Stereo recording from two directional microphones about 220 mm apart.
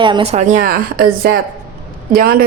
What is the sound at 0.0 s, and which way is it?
A woman's voice, 20° right (ahead or behind).